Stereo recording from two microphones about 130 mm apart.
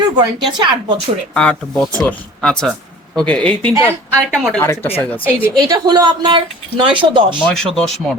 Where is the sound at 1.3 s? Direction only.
5° left (ahead or behind).